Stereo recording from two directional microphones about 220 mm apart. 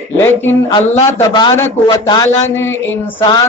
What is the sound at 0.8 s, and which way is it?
A man's voice, 25° left (ahead or behind).